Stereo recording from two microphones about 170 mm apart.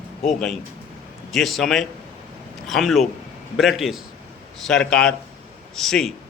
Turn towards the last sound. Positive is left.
turn(degrees=0)  # may be behind; listen again after turning